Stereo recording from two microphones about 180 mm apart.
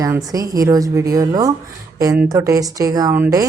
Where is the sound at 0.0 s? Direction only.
20° right (ahead or behind).